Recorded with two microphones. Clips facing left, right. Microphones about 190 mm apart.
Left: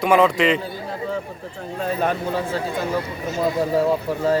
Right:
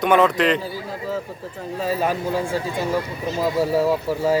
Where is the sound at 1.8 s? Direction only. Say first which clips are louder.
Even; 5° right (ahead or behind).